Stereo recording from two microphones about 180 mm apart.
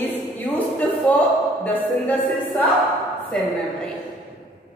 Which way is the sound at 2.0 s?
10° left (ahead or behind).